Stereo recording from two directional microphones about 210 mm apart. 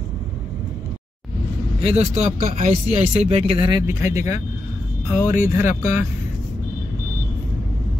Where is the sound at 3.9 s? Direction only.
15° right (ahead or behind).